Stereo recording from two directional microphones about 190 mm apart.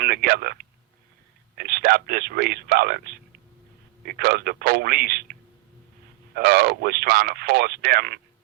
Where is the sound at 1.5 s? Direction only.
55° right (ahead or behind).